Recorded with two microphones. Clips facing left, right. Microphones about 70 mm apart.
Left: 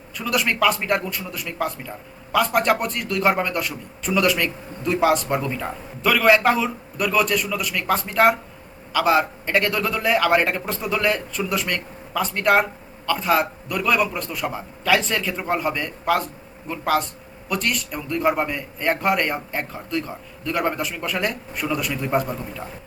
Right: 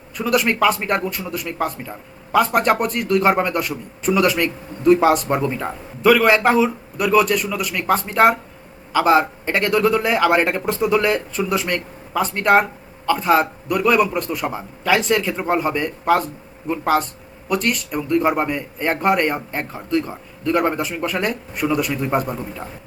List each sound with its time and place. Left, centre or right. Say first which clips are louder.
0.2 s a man's voice: right 4 dB; centre
5.4 s a man's voice: right 4 dB; centre